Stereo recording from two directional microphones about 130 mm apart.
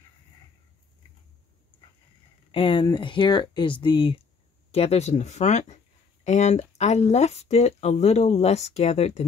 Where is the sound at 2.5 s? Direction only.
40° left (ahead or behind).